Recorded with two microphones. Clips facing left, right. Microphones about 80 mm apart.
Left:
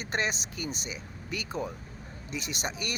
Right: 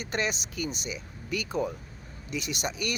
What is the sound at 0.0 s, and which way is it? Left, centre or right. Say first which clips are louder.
Speech: right 1 dB; left.